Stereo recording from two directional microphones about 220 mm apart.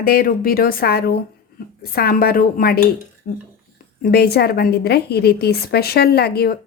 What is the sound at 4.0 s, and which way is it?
Speech, 45° left (ahead or behind).